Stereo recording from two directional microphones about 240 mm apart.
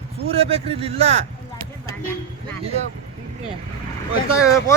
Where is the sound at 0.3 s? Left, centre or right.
Right.